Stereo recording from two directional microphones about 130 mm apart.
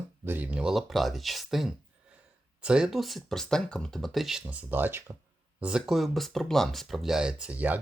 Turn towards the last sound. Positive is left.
turn(degrees=-10)  # may be behind; listen again after turning